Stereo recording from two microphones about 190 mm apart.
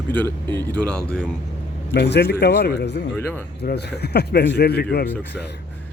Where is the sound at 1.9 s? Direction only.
60° left (ahead or behind).